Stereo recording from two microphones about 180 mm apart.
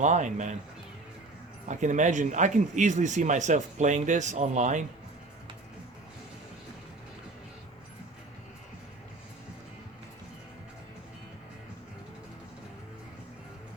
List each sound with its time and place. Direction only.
0.0 s speech: 40° right (ahead or behind)
1.6 s speech: 40° right (ahead or behind)